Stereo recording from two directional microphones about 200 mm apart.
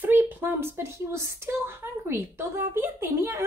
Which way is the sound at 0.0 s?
10° right (ahead or behind).